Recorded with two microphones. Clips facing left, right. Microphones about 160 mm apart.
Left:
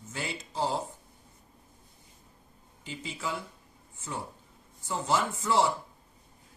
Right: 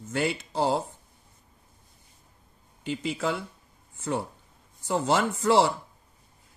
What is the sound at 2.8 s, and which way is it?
Speech, 65° right (ahead or behind).